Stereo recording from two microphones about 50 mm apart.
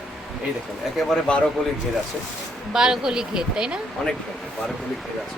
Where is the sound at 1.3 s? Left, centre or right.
Left.